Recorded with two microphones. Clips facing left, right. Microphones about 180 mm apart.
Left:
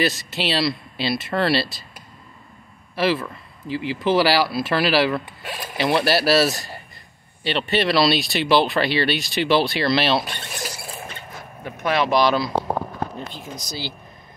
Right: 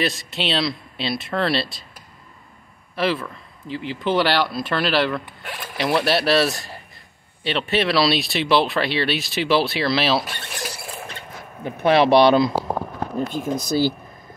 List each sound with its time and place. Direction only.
0.0 s speech: centre (ahead or behind)
3.0 s speech: 5° left (ahead or behind)
11.6 s speech: 30° right (ahead or behind)
13.3 s speech: 50° right (ahead or behind)